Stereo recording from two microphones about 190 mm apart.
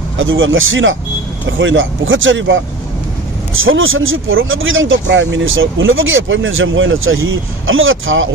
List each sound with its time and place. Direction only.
0.2 s speech: 90° right